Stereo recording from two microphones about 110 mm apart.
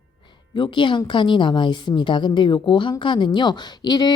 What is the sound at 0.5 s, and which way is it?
A woman's voice, 45° left (ahead or behind).